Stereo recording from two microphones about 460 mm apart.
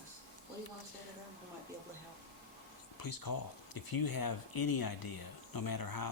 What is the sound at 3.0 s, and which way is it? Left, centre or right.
Speech, left.